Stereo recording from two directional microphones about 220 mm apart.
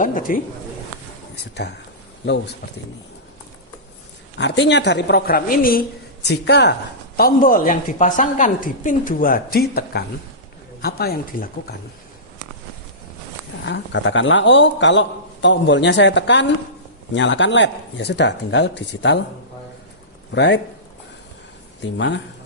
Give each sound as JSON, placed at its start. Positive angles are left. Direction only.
{"t": 0.0, "sound": "a woman's voice", "side_deg": 40}
{"t": 4.4, "sound": "speech", "side_deg": 55}
{"t": 7.2, "sound": "a woman's voice", "side_deg": 40}
{"t": 13.7, "sound": "a man's voice", "side_deg": 55}
{"t": 20.3, "sound": "speech", "side_deg": 55}
{"t": 21.8, "sound": "speech", "side_deg": 55}